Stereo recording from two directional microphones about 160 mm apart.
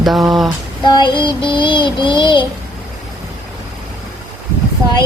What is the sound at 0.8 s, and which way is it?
Child singing, 30° left (ahead or behind).